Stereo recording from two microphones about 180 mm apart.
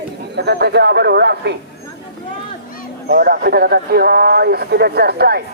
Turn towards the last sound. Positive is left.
turn(degrees=-60)  # may be behind; listen again after turning